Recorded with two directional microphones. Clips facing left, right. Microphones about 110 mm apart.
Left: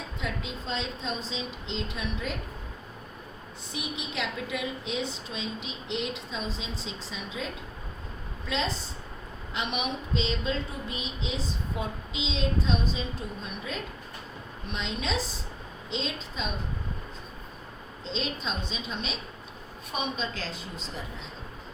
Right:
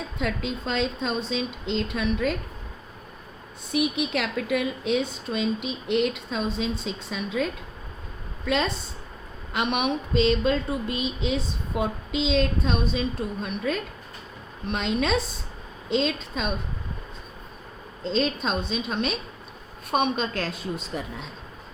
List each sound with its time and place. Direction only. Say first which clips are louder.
0.2 s a woman's voice: right 7 dB; 65° right (ahead or behind)
3.7 s a woman's voice: right 12 dB; 65° right (ahead or behind)
18.0 s a woman's voice: right 8 dB; 50° right (ahead or behind)